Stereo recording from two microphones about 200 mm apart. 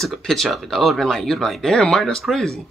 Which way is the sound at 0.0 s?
Centre (ahead or behind).